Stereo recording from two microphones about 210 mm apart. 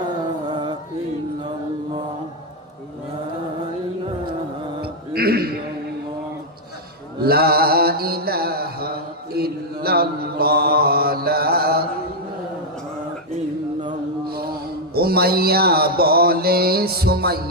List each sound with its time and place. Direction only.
0.4 s music: 20° right (ahead or behind)
4.8 s mantra: 45° right (ahead or behind)
7.2 s mantra: 45° right (ahead or behind)
14.3 s a sound: 45° right (ahead or behind)
14.9 s mantra: 45° right (ahead or behind)